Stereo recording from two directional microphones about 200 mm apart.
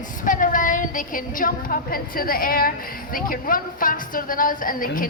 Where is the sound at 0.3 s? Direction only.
40° left (ahead or behind).